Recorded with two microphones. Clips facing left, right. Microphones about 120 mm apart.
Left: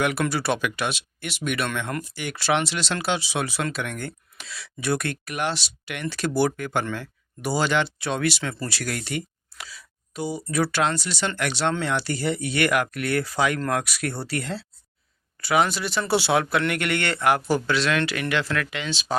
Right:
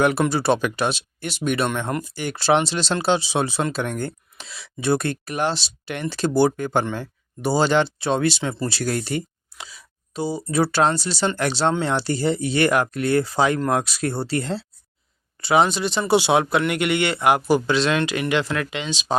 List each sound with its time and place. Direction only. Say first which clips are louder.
0.0 s speech: right 5 dB; 30° right (ahead or behind)
9.6 s speech: right 1 dB; 25° right (ahead or behind)